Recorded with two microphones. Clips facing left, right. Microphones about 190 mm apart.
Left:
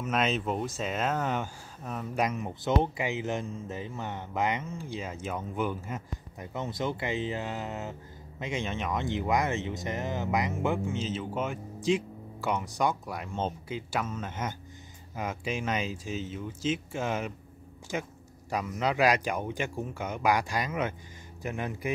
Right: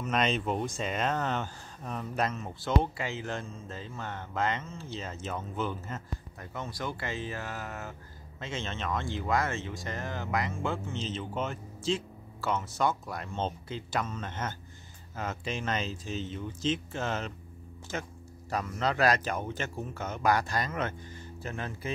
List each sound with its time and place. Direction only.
0.0 s speech: 5° left (ahead or behind)